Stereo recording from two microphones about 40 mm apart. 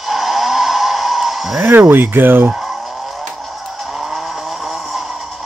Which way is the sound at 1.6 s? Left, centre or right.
Right.